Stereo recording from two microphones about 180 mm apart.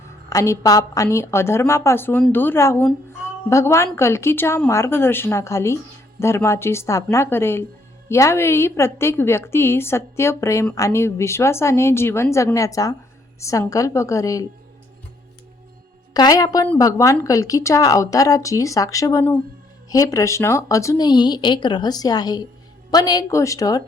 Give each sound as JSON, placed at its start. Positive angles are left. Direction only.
{"t": 0.3, "sound": "a woman's voice", "side_deg": 15}
{"t": 16.1, "sound": "a woman's voice", "side_deg": 20}